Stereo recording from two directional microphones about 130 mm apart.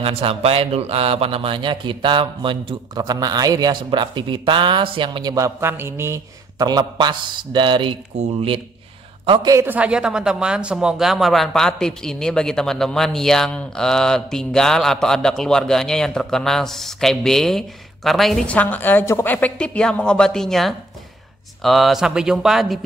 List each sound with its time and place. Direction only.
0.0 s a man's voice: 45° right (ahead or behind); by 6.2 s 20° right (ahead or behind)
6.6 s a man's voice: 35° right (ahead or behind)
8.1 s speech: 60° right (ahead or behind)
9.2 s a woman's voice: 40° right (ahead or behind)
9.5 s speech: 20° right (ahead or behind)
9.8 s speech: 5° right (ahead or behind)